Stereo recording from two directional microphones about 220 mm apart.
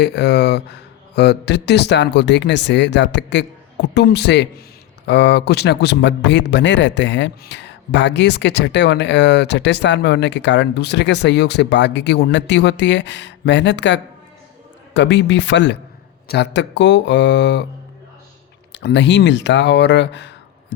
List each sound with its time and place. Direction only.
0.0 s speech: 50° left (ahead or behind)
18.7 s speech: 50° left (ahead or behind)